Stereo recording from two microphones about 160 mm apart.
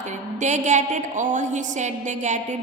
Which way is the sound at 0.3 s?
50° right (ahead or behind).